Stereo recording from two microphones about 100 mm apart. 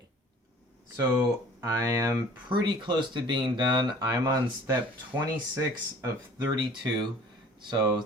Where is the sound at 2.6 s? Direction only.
50° right (ahead or behind).